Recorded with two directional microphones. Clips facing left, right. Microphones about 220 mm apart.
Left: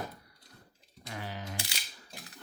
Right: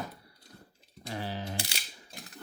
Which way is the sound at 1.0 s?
30° right (ahead or behind).